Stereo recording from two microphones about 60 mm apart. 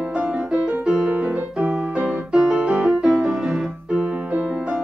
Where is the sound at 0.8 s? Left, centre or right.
Centre.